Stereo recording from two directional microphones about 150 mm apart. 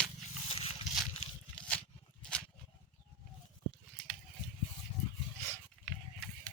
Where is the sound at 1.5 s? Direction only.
5° left (ahead or behind).